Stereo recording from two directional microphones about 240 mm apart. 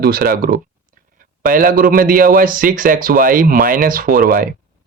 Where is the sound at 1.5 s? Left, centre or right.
Right.